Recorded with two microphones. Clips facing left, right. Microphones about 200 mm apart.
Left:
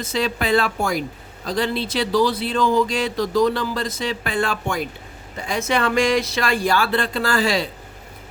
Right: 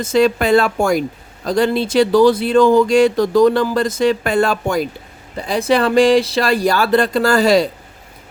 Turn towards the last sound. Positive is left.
turn(degrees=-40)  # may be behind; listen again after turning